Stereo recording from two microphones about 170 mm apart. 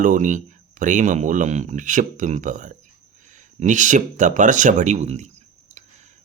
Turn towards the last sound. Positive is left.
turn(degrees=-45)  # may be behind; listen again after turning